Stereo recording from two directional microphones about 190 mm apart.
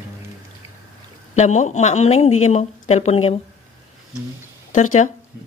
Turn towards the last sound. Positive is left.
turn(degrees=40)  # may be behind; listen again after turning